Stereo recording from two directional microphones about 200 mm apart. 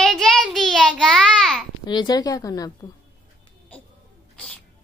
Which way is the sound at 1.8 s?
20° left (ahead or behind).